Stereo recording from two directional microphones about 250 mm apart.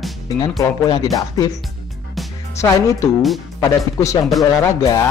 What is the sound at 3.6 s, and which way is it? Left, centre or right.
Speech, centre.